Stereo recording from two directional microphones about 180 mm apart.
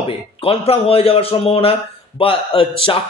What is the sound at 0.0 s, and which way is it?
Speech, 30° left (ahead or behind).